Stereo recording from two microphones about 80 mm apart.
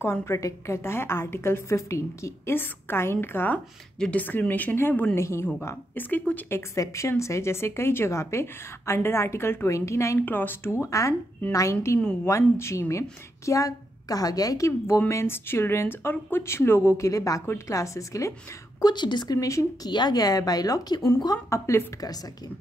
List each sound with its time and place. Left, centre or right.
0.0 s speech: left
5.2 s speech: left
6.5 s speech: left
10.2 s a woman's voice: left
15.0 s speech: left
18.8 s a woman's voice: left
19.3 s speech: left
19.9 s speech: left
21.5 s speech: left